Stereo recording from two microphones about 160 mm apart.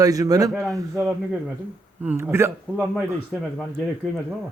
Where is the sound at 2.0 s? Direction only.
15° right (ahead or behind).